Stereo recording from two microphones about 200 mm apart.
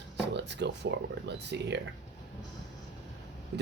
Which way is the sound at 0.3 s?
60° right (ahead or behind).